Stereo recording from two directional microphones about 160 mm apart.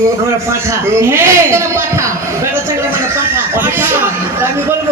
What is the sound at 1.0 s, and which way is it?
Speech, 15° right (ahead or behind).